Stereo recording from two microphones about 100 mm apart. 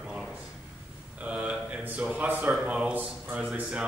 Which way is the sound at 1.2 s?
10° right (ahead or behind).